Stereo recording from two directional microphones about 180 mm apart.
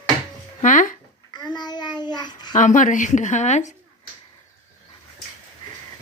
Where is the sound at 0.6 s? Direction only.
45° left (ahead or behind).